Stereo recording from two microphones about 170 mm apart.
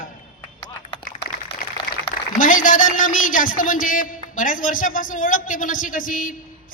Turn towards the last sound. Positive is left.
turn(degrees=50)  # may be behind; listen again after turning